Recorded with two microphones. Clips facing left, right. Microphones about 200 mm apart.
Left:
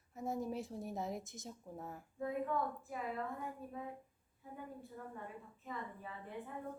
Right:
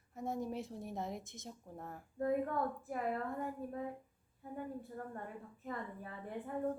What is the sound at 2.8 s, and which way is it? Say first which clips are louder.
Speech: right 5 dB; 55° right (ahead or behind).